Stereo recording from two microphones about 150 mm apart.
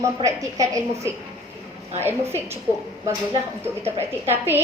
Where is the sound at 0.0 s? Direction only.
20° right (ahead or behind).